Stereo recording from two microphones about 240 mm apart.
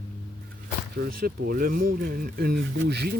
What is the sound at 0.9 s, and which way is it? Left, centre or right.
Speech, right.